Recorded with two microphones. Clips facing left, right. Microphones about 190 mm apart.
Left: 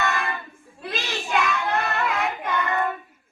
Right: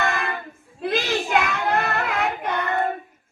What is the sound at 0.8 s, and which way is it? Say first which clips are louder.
Child singing: right 8 dB; 55° right (ahead or behind).